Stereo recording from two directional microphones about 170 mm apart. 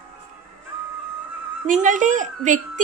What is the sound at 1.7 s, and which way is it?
A woman's voice, 50° right (ahead or behind).